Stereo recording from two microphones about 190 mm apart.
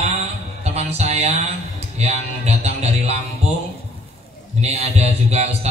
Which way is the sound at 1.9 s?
35° right (ahead or behind).